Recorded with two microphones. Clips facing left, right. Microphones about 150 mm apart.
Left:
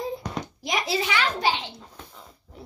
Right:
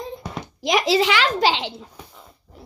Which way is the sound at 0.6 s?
90° right.